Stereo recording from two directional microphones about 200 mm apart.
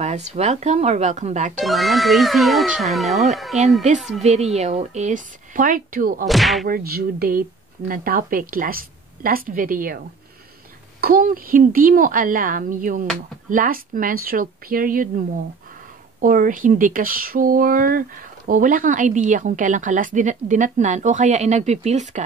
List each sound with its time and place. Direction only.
0.0 s speech: 35° right (ahead or behind)
1.6 s speech: centre (ahead or behind)
4.2 s speech: 35° right (ahead or behind)
6.2 s speech: centre (ahead or behind)
6.6 s a woman's voice: 50° right (ahead or behind)
11.0 s a woman's voice: 45° right (ahead or behind)